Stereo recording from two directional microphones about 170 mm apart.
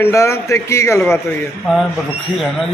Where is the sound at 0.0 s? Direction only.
15° left (ahead or behind).